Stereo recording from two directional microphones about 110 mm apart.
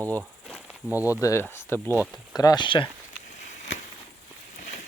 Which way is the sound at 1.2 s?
25° left (ahead or behind).